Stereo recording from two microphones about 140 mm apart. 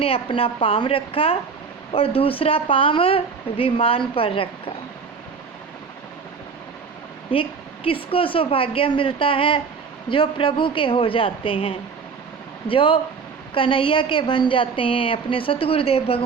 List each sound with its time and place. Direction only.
0.0 s speech: 40° left (ahead or behind)
7.3 s speech: 40° left (ahead or behind)